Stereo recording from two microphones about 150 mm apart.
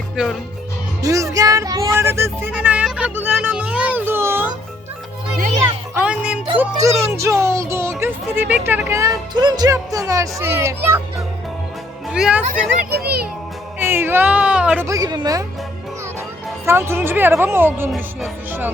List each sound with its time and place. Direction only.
1.0 s speech: 20° right (ahead or behind)
2.6 s a sound: 5° right (ahead or behind)
5.9 s music: 10° right (ahead or behind)
6.6 s speech: 20° right (ahead or behind)
12.1 s a woman's voice: 5° right (ahead or behind)
13.7 s a sound: 15° right (ahead or behind)
14.8 s speech: 25° right (ahead or behind)
16.6 s a woman's voice: 15° right (ahead or behind)